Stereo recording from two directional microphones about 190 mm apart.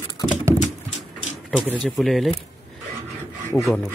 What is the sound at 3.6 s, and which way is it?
Speech, centre (ahead or behind).